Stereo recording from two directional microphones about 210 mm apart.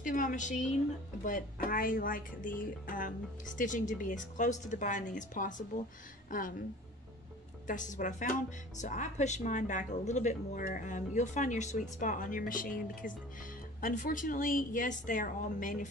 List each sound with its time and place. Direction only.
0.0 s a woman's voice: 40° left (ahead or behind)
7.6 s speech: 35° left (ahead or behind)